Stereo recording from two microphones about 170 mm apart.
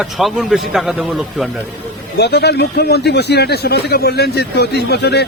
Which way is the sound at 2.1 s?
75° left (ahead or behind).